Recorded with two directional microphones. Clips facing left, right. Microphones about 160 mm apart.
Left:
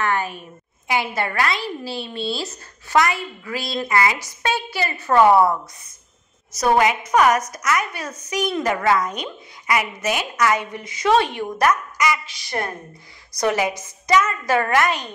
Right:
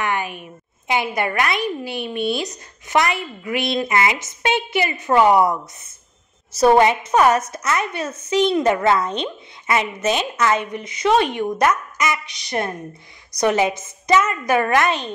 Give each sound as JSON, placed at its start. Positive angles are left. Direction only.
{"t": 0.0, "sound": "a woman's voice", "side_deg": -15}
{"t": 6.5, "sound": "a woman's voice", "side_deg": -30}